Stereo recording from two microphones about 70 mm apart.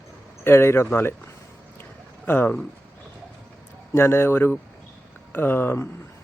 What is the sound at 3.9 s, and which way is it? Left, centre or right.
Speech, left.